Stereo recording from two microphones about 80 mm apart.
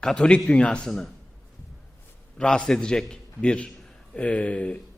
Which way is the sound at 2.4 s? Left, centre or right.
Centre.